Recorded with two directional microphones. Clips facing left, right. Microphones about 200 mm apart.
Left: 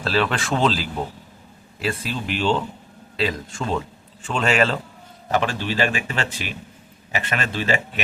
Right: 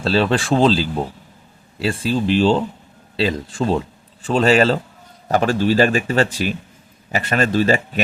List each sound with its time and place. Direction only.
0.0 s speech: 30° right (ahead or behind)